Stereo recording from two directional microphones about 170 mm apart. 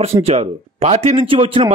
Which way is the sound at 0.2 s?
40° right (ahead or behind).